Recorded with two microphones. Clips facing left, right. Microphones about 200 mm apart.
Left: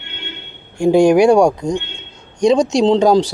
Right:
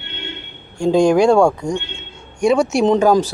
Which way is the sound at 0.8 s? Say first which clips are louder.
Left 3 dB; 10° left (ahead or behind).